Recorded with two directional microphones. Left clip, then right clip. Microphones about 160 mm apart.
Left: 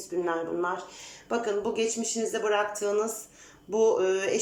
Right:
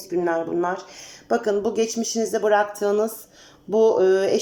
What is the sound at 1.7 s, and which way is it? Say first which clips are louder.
Speech: right 6 dB; 30° right (ahead or behind).